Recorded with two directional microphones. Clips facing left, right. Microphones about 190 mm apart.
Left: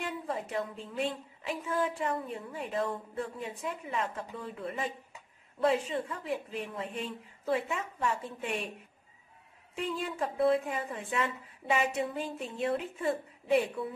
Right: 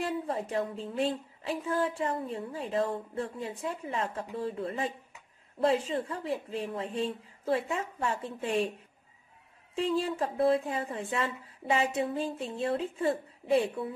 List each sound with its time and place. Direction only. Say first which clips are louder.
0.0 s a woman's voice: right 4 dB; 35° right (ahead or behind)
9.8 s a woman's voice: right 5 dB; 30° right (ahead or behind)